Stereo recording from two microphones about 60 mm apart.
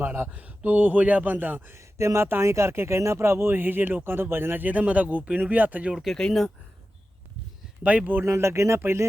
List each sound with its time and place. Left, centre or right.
0.0 s a man's voice: right
1.8 s speech: right
6.1 s speech: centre
7.9 s a man's voice: right
8.2 s speech: right